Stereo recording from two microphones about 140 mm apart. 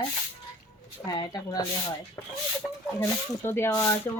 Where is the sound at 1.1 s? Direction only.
25° left (ahead or behind).